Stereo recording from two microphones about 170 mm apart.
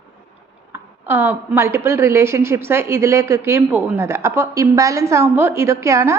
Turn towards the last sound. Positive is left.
turn(degrees=-15)  # may be behind; listen again after turning